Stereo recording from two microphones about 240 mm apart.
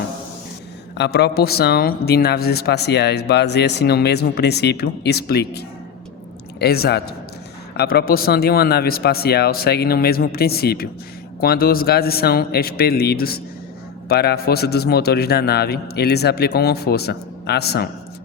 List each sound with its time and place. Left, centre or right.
0.9 s a man's voice: left